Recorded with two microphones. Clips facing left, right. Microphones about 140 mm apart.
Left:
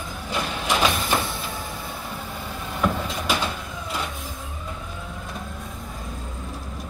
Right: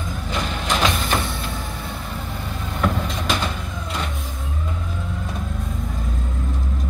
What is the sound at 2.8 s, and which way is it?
Vehicle, 5° left (ahead or behind).